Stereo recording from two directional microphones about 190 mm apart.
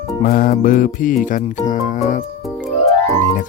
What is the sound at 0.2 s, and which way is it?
Music, 50° left (ahead or behind).